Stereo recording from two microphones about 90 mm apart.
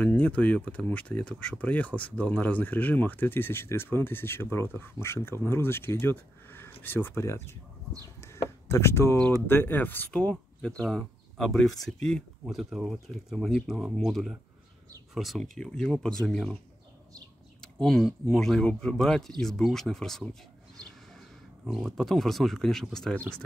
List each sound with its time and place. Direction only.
0.0 s speech: 15° left (ahead or behind)
8.2 s a sound: 30° left (ahead or behind)
9.2 s speech: 20° left (ahead or behind)
10.3 s speech: 5° left (ahead or behind)
12.4 s speech: 5° right (ahead or behind)
17.6 s a sound: 10° left (ahead or behind)
18.3 s speech: 5° left (ahead or behind)
21.6 s speech: centre (ahead or behind)